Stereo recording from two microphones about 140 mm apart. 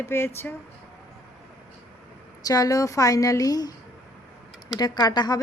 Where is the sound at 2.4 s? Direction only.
25° left (ahead or behind).